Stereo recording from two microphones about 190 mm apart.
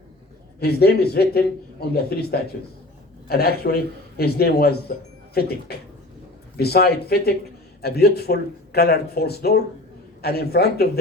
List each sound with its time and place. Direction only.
0.6 s speech: 55° left (ahead or behind)